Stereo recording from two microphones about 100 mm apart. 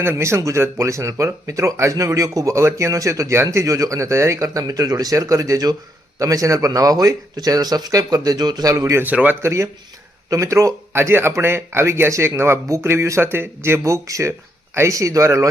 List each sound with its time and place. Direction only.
0.0 s speech: 25° right (ahead or behind)
9.0 s speech: 15° right (ahead or behind)